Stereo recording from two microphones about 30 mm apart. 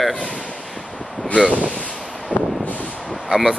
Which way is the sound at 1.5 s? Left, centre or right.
Left.